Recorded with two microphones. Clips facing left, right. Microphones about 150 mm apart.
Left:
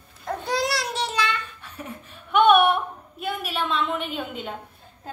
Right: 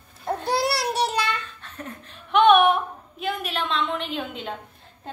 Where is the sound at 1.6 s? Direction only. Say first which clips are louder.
Even; 10° left (ahead or behind).